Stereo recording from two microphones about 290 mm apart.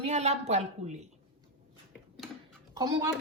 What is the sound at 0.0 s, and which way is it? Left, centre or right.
Speech, right.